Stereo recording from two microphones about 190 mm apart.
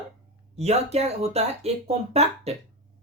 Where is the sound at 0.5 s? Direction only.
35° right (ahead or behind).